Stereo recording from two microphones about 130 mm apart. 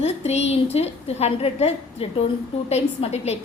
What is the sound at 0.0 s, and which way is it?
A woman's voice, 55° left (ahead or behind).